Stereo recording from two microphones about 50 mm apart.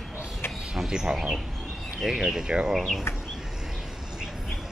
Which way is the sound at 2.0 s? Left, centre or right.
Centre.